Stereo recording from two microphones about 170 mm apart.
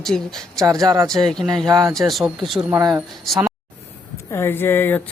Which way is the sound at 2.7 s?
15° right (ahead or behind).